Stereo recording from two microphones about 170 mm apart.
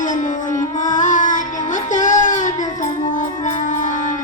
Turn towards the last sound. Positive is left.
turn(degrees=45)  # may be behind; listen again after turning